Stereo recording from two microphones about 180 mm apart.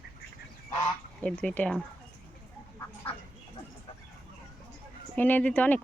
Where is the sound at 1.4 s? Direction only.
5° left (ahead or behind).